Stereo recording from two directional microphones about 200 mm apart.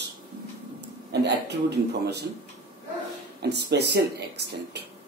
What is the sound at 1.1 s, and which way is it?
A man's voice, 55° right (ahead or behind).